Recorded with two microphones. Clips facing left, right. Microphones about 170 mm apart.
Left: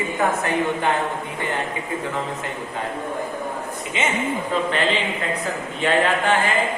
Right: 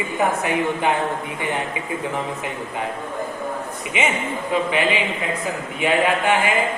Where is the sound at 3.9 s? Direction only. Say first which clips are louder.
Even; 15° right (ahead or behind).